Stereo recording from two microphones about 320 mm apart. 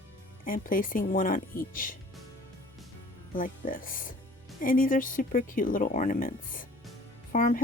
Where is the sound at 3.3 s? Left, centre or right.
Left.